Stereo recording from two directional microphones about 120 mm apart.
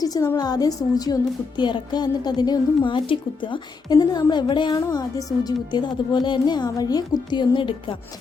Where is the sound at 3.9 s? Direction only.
30° left (ahead or behind).